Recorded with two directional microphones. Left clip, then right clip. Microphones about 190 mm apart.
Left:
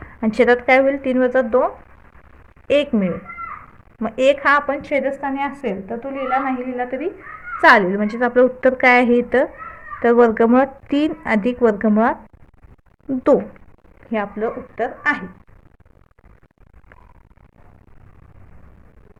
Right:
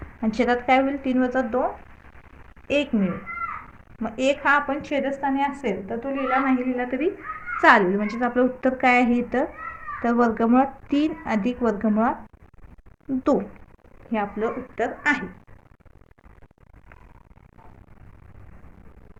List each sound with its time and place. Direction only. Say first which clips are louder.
0.2 s a woman's voice: left 8 dB; 50° left (ahead or behind); by 7.1 s 25° left (ahead or behind)
7.6 s a woman's voice: left 4 dB; 35° left (ahead or behind)
14.1 s a woman's voice: left 3 dB; 35° left (ahead or behind)
15.1 s a woman's voice: left 3 dB; 20° left (ahead or behind)